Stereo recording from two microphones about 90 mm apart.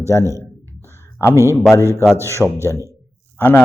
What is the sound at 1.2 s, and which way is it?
A man's voice, 30° left (ahead or behind).